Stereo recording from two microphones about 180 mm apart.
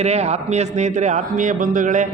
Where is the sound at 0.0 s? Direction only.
35° right (ahead or behind).